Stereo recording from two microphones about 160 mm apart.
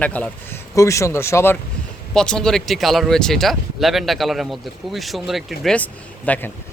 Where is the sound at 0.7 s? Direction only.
20° left (ahead or behind).